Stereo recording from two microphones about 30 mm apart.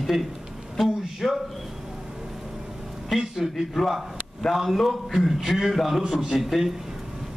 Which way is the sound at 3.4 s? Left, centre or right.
Centre.